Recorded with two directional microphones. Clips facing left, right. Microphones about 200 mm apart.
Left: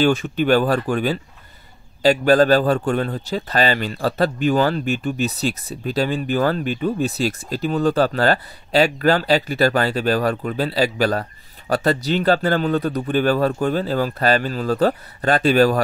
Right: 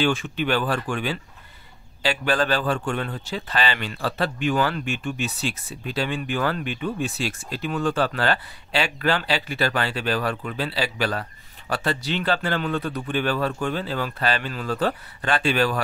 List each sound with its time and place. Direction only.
0.0 s a man's voice: 40° left (ahead or behind)